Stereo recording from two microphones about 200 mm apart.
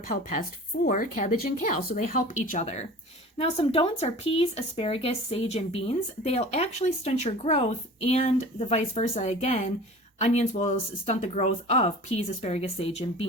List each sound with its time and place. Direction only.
0.9 s speech: 40° left (ahead or behind)